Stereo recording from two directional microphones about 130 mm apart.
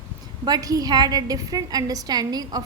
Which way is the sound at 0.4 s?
30° right (ahead or behind).